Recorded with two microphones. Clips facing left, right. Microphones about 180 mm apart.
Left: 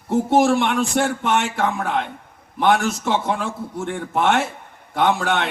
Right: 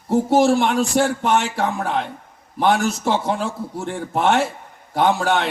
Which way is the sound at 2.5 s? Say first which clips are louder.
Even; 35° right (ahead or behind).